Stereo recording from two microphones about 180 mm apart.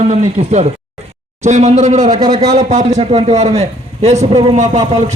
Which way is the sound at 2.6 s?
40° right (ahead or behind).